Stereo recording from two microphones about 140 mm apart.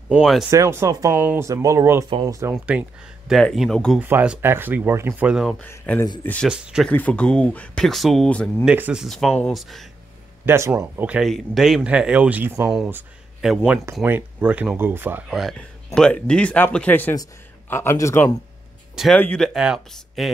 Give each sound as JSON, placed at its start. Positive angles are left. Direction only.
{"t": 0.2, "sound": "speech", "side_deg": 0}
{"t": 0.5, "sound": "speech", "side_deg": -20}
{"t": 1.5, "sound": "speech", "side_deg": -25}
{"t": 2.6, "sound": "speech", "side_deg": -10}
{"t": 4.0, "sound": "speech", "side_deg": -10}
{"t": 5.6, "sound": "speech", "side_deg": 15}
{"t": 6.5, "sound": "speech", "side_deg": -5}
{"t": 6.9, "sound": "speech", "side_deg": 10}
{"t": 8.6, "sound": "speech", "side_deg": -10}
{"t": 10.4, "sound": "speech", "side_deg": -15}
{"t": 12.6, "sound": "speech", "side_deg": -5}
{"t": 14.0, "sound": "speech", "side_deg": -10}
{"t": 15.2, "sound": "speech", "side_deg": 0}